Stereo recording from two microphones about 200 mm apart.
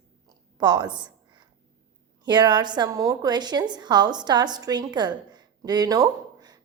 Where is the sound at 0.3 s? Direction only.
20° right (ahead or behind).